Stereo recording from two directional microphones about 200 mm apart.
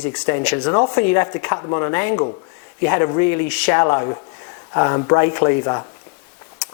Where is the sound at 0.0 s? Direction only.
15° left (ahead or behind).